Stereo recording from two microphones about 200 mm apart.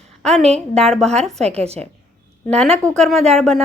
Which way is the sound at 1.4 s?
30° right (ahead or behind).